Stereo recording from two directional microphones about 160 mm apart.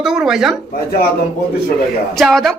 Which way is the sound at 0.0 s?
5° right (ahead or behind).